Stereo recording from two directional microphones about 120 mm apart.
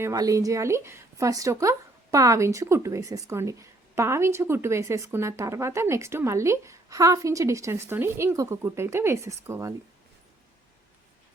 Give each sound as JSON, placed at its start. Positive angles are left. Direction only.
{"t": 0.0, "sound": "speech", "side_deg": -30}